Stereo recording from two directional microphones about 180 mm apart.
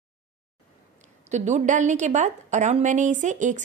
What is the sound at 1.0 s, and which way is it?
A woman's voice, 40° right (ahead or behind).